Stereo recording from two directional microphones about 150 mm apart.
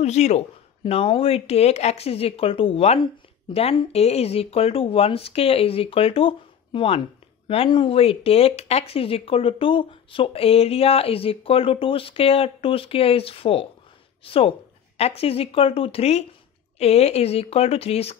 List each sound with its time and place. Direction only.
0.0 s speech: 50° left (ahead or behind)